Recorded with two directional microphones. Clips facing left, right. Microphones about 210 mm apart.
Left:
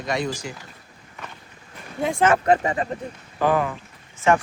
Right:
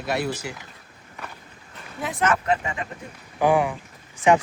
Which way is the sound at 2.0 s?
30° left (ahead or behind).